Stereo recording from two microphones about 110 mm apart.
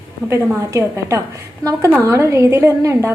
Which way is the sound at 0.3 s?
25° right (ahead or behind).